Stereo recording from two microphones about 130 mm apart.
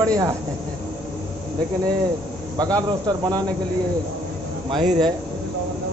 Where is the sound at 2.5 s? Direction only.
30° right (ahead or behind).